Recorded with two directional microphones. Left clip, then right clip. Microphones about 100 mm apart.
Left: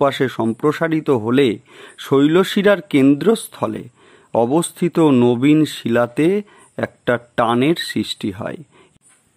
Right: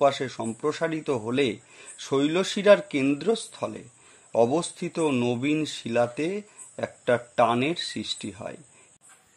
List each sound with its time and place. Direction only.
0.0 s speech: 40° left (ahead or behind)